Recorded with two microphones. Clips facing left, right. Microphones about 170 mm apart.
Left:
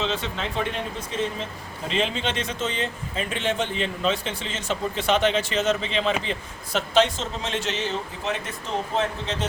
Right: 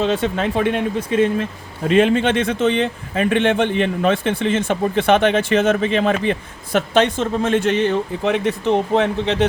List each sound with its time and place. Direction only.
0.0 s speech: 50° right (ahead or behind)